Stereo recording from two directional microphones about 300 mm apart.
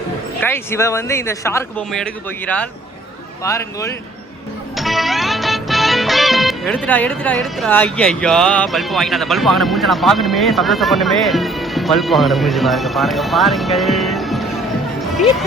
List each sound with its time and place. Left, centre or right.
0.4 s a man's voice: centre
4.8 s music: centre
15.1 s speech: centre